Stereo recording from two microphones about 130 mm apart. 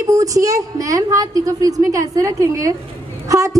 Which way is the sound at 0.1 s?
25° right (ahead or behind).